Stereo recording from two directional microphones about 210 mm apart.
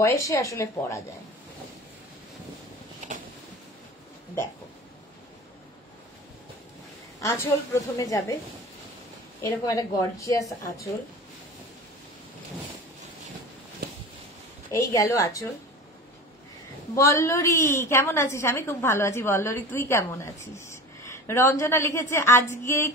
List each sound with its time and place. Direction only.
0.0 s a woman's voice: 15° left (ahead or behind)
7.2 s a woman's voice: 15° left (ahead or behind)
9.4 s a woman's voice: 15° left (ahead or behind)
14.7 s a woman's voice: 15° left (ahead or behind)
16.9 s a woman's voice: 15° left (ahead or behind)